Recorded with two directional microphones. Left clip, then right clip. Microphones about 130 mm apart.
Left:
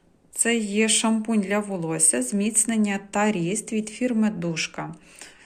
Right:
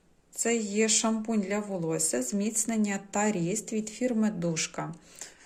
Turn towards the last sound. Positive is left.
turn(degrees=-30)  # may be behind; listen again after turning